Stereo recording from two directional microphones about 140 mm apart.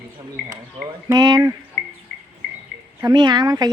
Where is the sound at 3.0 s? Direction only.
25° right (ahead or behind).